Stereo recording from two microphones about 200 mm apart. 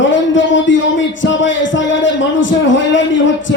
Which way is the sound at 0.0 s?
70° left (ahead or behind).